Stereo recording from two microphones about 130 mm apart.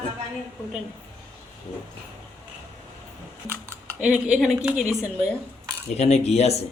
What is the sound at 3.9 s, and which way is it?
Speech, 10° right (ahead or behind).